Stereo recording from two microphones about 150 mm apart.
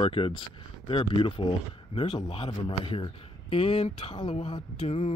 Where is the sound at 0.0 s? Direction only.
35° left (ahead or behind).